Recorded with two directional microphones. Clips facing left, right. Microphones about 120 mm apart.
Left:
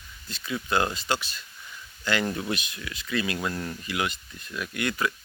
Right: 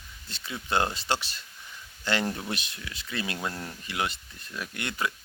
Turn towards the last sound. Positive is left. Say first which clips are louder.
# left 4 dB
turn(degrees=-25)  # may be behind; listen again after turning